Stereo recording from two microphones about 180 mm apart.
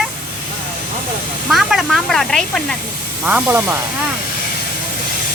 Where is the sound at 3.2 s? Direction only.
10° right (ahead or behind).